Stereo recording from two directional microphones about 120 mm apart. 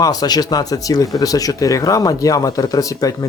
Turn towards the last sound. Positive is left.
turn(degrees=30)  # may be behind; listen again after turning